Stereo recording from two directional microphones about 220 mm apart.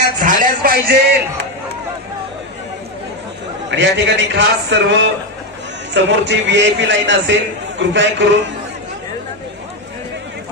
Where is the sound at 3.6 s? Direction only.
55° right (ahead or behind).